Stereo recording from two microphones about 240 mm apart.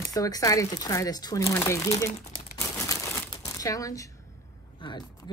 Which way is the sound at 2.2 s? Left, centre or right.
Left.